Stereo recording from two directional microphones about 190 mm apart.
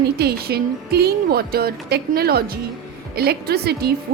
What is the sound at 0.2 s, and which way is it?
A woman's voice, 55° right (ahead or behind).